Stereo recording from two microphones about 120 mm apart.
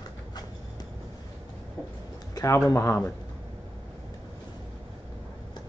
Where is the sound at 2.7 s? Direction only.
25° left (ahead or behind).